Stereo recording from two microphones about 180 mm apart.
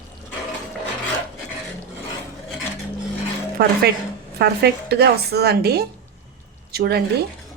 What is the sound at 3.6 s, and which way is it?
A woman's voice, 60° right (ahead or behind).